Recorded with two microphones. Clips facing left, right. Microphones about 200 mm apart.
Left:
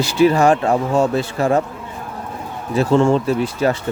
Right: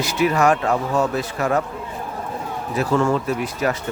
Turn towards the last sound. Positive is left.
turn(degrees=30)  # may be behind; listen again after turning